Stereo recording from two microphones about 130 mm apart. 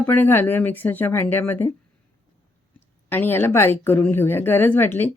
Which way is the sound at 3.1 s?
15° left (ahead or behind).